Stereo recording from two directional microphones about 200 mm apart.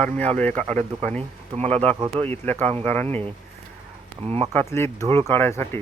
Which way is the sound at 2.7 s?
30° right (ahead or behind).